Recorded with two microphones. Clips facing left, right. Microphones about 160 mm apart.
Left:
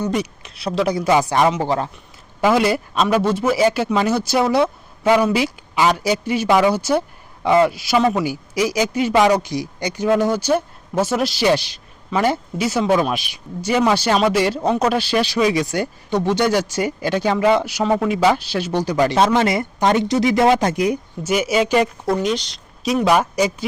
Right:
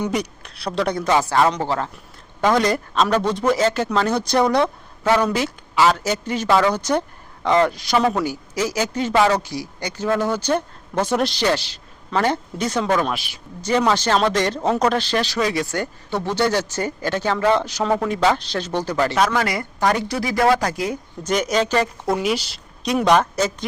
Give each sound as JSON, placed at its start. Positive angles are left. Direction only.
{"t": 0.1, "sound": "a woman's voice", "side_deg": 0}
{"t": 19.1, "sound": "speech", "side_deg": 25}
{"t": 21.2, "sound": "speech", "side_deg": 5}
{"t": 22.0, "sound": "a woman's voice", "side_deg": -5}